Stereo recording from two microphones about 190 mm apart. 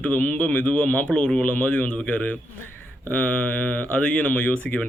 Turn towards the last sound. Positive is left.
turn(degrees=5)  # may be behind; listen again after turning